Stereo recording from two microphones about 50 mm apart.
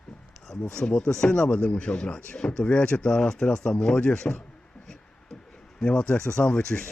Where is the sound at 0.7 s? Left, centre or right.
Centre.